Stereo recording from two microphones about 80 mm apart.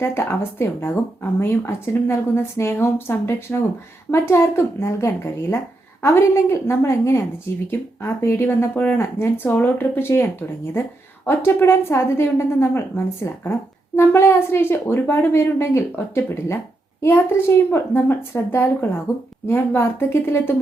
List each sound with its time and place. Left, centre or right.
0.0 s a woman's voice: left
11.3 s a woman's voice: left